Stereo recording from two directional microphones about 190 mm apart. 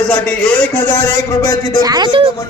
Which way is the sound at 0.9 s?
15° left (ahead or behind).